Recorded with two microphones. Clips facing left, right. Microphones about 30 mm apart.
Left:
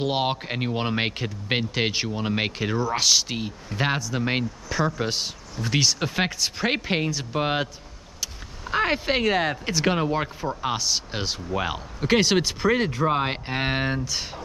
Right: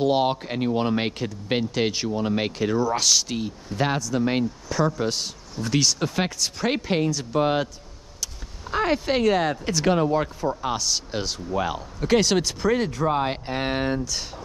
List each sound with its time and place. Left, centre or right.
0.0 s speech: centre